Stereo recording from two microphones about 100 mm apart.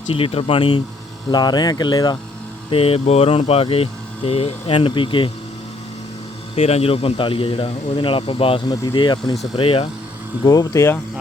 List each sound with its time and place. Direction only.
0.1 s speech: 70° left (ahead or behind)
1.3 s speech: 45° left (ahead or behind)
2.6 s speech: 70° left (ahead or behind)
6.6 s speech: 85° left; by 8.6 s 65° left (ahead or behind)
8.6 s speech: 45° left (ahead or behind)
9.6 s speech: 65° left (ahead or behind)
10.4 s speech: 40° left (ahead or behind)